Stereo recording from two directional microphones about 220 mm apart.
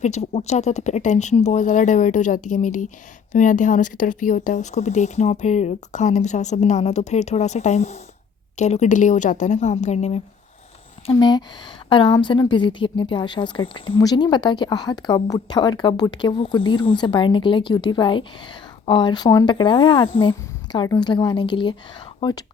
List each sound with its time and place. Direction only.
0.0 s speech: 30° left (ahead or behind)
11.0 s a woman's voice: 20° left (ahead or behind)